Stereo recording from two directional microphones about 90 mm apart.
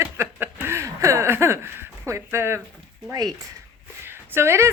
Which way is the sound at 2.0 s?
30° right (ahead or behind).